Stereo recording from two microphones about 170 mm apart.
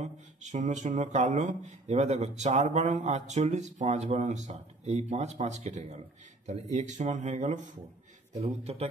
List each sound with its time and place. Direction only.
0.0 s a man's voice: 45° right (ahead or behind)